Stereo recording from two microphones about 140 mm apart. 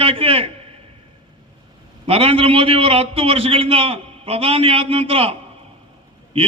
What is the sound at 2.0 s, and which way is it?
A man's voice, 45° right (ahead or behind).